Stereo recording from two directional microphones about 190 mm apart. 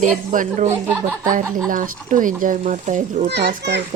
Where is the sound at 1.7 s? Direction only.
45° right (ahead or behind).